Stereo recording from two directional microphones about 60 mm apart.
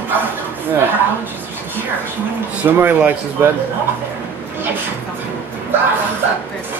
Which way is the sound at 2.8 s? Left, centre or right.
Right.